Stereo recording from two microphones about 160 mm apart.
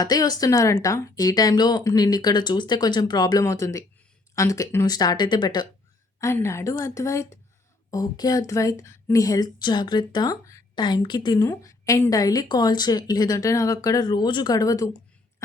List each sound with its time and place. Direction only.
0.0 s speech: 25° left (ahead or behind)